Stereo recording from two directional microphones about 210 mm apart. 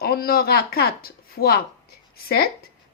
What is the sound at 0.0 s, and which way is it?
A woman's voice, 45° left (ahead or behind).